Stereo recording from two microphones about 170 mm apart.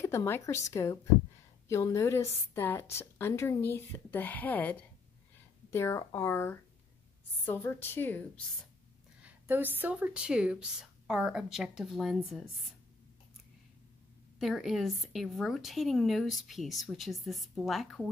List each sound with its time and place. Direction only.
0.0 s a woman's voice: 15° left (ahead or behind)
9.2 s a woman's voice: 10° right (ahead or behind)
12.2 s a woman's voice: 10° left (ahead or behind)
14.4 s a woman's voice: centre (ahead or behind)